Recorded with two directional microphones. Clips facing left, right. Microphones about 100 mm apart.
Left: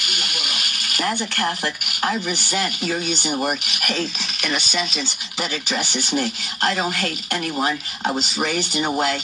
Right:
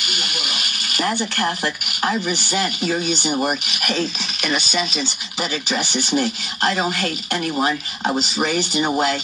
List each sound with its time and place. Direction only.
0.0 s a sound: 20° right (ahead or behind)
2.5 s speech: 25° right (ahead or behind); by 4.8 s 10° right (ahead or behind)
4.9 s speech: 25° right (ahead or behind)
8.7 s speech: 15° right (ahead or behind)